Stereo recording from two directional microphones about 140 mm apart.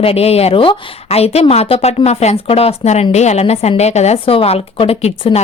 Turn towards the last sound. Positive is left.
turn(degrees=45)  # may be behind; listen again after turning